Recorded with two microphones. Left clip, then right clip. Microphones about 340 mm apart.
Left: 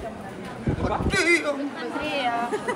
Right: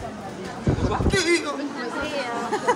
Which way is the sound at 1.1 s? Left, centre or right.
Centre.